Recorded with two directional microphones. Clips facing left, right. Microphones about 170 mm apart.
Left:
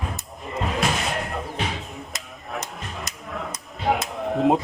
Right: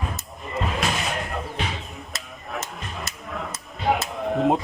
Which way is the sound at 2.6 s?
15° left (ahead or behind).